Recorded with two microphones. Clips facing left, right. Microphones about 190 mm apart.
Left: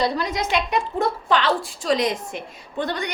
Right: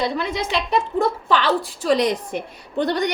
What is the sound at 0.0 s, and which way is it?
Speech, 25° right (ahead or behind).